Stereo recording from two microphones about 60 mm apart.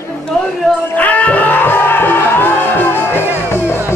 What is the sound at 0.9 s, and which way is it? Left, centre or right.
Music, left.